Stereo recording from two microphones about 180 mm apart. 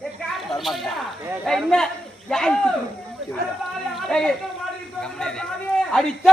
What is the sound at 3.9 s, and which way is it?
A man's voice, 5° left (ahead or behind).